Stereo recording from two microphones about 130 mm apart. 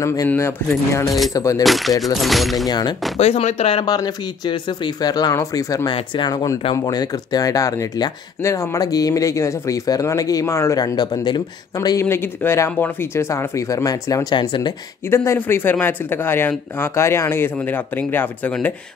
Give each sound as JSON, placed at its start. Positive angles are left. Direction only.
{"t": 0.0, "sound": "speech", "side_deg": 25}
{"t": 1.3, "sound": "speech", "side_deg": 25}
{"t": 1.6, "sound": "speech", "side_deg": 0}
{"t": 3.2, "sound": "speech", "side_deg": 55}
{"t": 3.8, "sound": "speech", "side_deg": 30}
{"t": 12.0, "sound": "speech", "side_deg": 20}
{"t": 15.0, "sound": "speech", "side_deg": 20}